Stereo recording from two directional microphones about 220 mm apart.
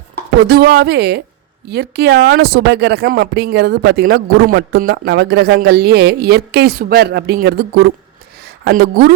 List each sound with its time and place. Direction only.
0.4 s speech: 45° right (ahead or behind)